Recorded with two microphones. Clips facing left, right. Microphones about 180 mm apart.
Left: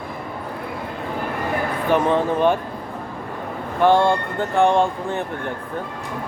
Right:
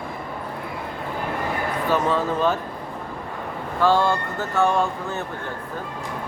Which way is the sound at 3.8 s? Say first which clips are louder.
Left 4 dB; 20° left (ahead or behind).